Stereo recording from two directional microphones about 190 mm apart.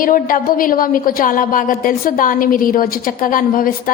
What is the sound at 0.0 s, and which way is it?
A woman's voice, 45° left (ahead or behind).